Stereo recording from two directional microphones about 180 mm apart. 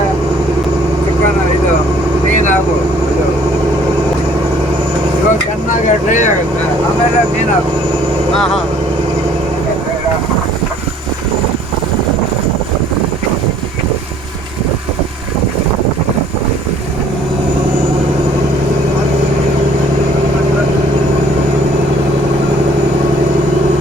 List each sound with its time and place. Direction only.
5.7 s vehicle: 45° left (ahead or behind)